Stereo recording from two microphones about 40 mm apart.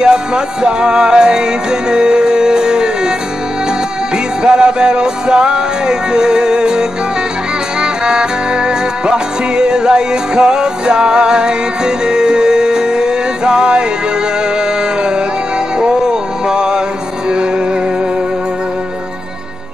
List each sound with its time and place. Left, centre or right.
0.0 s music: right
4.4 s music: right
15.8 s music: centre